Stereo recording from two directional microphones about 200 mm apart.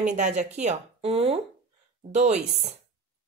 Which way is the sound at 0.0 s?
35° right (ahead or behind).